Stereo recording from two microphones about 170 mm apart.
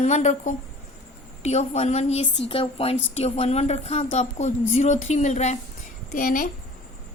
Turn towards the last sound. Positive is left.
turn(degrees=55)  # may be behind; listen again after turning